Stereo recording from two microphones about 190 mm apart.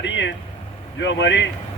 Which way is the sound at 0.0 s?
70° left (ahead or behind).